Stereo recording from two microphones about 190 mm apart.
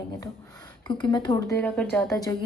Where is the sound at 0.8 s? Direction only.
25° left (ahead or behind).